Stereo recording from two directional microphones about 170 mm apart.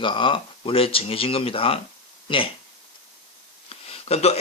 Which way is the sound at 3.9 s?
35° left (ahead or behind).